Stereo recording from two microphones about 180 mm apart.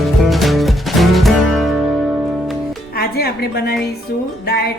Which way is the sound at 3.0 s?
55° left (ahead or behind).